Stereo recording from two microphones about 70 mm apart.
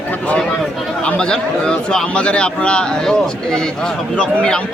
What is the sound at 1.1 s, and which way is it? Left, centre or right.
Speech, centre.